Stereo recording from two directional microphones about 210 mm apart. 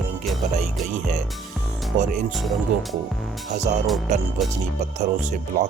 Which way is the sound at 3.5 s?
35° right (ahead or behind).